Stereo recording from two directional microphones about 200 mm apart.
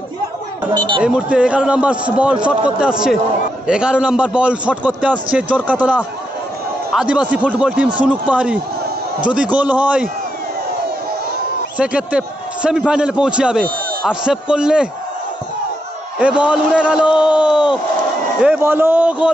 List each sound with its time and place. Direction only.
0.7 s speech: 25° right (ahead or behind)
1.0 s a man's voice: 5° right (ahead or behind)
11.8 s a man's voice: 5° right (ahead or behind)
16.2 s a man's voice: 5° right (ahead or behind)